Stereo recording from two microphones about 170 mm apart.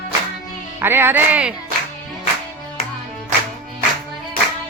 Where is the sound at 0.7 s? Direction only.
15° right (ahead or behind).